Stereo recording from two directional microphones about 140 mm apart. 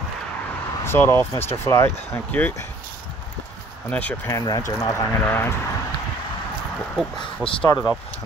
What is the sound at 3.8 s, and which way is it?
Speech, 10° left (ahead or behind).